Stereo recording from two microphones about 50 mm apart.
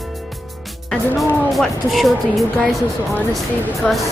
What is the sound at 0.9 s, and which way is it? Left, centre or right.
Speech, centre.